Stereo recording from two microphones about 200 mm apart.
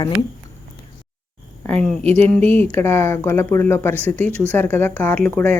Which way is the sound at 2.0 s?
30° right (ahead or behind).